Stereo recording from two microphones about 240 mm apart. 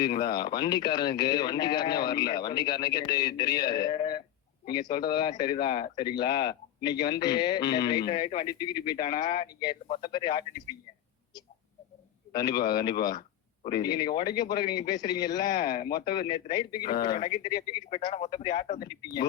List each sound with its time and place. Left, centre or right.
0.0 s speech: centre
12.3 s a man's voice: centre
17.6 s speech: left
18.8 s speech: centre